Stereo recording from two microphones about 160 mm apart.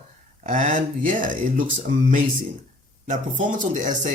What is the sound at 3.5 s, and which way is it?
Speech, 55° right (ahead or behind).